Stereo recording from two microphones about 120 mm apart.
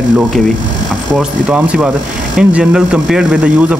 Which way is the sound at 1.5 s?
10° right (ahead or behind).